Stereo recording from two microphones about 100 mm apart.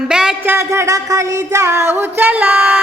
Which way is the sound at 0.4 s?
25° right (ahead or behind).